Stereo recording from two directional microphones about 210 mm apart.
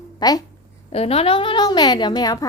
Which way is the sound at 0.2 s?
20° left (ahead or behind).